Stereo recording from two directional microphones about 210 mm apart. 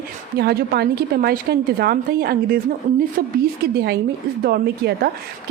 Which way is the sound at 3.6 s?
50° right (ahead or behind).